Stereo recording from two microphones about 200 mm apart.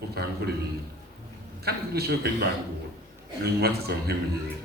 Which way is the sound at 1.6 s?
50° right (ahead or behind).